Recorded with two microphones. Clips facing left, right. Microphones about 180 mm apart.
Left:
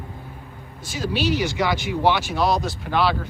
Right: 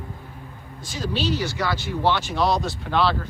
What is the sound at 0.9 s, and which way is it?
Speech, 10° left (ahead or behind).